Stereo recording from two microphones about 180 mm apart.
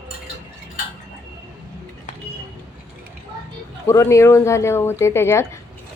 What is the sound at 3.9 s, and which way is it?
A woman's voice, 15° left (ahead or behind).